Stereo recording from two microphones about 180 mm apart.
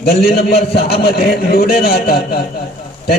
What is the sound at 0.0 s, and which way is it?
A man's voice, 60° left (ahead or behind).